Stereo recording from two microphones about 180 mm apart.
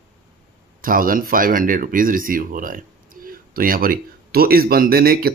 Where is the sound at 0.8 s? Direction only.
50° right (ahead or behind).